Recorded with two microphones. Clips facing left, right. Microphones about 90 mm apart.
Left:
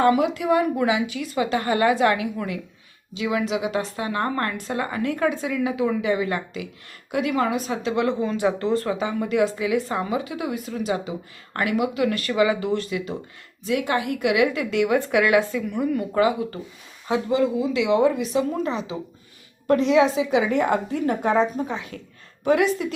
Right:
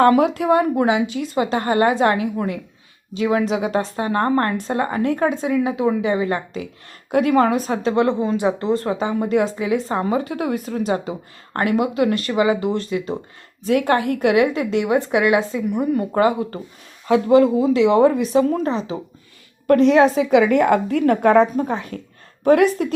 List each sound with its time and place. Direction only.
0.0 s a woman's voice: 45° right (ahead or behind)
0.6 s a woman's voice: 30° right (ahead or behind)
13.7 s a woman's voice: 50° right (ahead or behind)
14.4 s speech: 30° right (ahead or behind)
16.1 s a woman's voice: 40° right (ahead or behind)
17.1 s a woman's voice: 60° right (ahead or behind)
17.6 s a woman's voice: 40° right (ahead or behind)
19.6 s a woman's voice: 50° right (ahead or behind)